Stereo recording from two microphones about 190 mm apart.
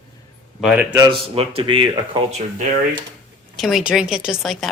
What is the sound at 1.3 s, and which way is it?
Speech, 30° right (ahead or behind).